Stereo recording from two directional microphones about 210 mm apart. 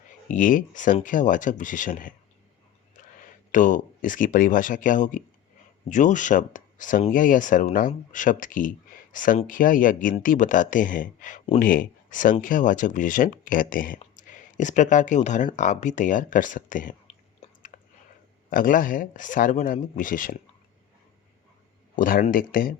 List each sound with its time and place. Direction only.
0.3 s speech: 40° left (ahead or behind)
3.5 s speech: 40° left (ahead or behind)
17.4 s chewing: 40° left (ahead or behind)
18.5 s speech: 40° left (ahead or behind)
21.9 s speech: 40° left (ahead or behind)